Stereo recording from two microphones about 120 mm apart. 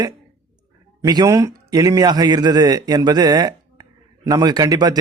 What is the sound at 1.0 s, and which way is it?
A man's voice, 30° right (ahead or behind).